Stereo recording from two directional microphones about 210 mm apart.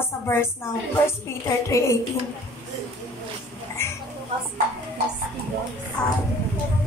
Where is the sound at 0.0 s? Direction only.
10° left (ahead or behind).